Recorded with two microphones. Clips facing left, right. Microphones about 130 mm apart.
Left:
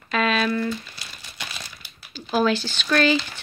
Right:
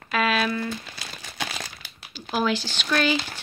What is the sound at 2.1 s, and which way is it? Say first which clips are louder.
Speech: left 4 dB; 15° right (ahead or behind).